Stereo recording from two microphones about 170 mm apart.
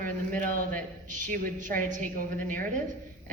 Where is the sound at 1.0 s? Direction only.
50° right (ahead or behind).